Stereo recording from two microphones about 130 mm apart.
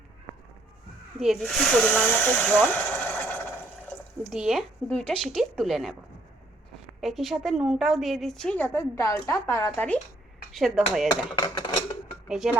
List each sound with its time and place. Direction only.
1.2 s speech: centre (ahead or behind)
2.5 s a sound: 10° left (ahead or behind)
4.3 s a woman's voice: centre (ahead or behind)
7.0 s a woman's voice: centre (ahead or behind); by 9.8 s 25° left (ahead or behind)
10.5 s a woman's voice: centre (ahead or behind)
11.1 s speech: 35° left (ahead or behind)
12.4 s a woman's voice: 5° right (ahead or behind)